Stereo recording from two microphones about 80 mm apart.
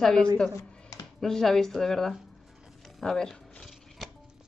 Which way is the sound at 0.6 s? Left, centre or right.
Left.